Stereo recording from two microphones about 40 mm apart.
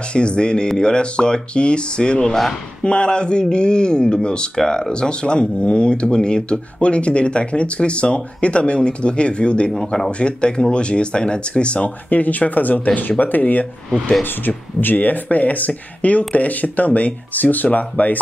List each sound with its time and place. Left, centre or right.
0.1 s speech: left
2.2 s speech: centre
2.8 s speech: left
12.1 s speech: left
14.8 s speech: left